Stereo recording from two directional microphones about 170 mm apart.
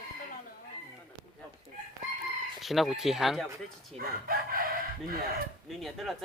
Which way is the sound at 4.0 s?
60° right (ahead or behind).